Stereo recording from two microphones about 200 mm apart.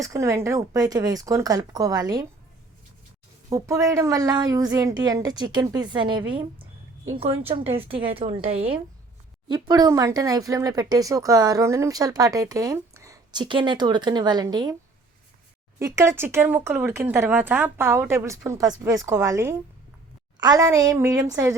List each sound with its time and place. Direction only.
0.0 s speech: 15° right (ahead or behind)
3.5 s a woman's voice: 15° right (ahead or behind)
15.8 s speech: 15° right (ahead or behind)